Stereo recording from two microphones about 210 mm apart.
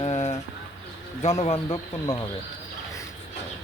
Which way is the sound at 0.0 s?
30° left (ahead or behind).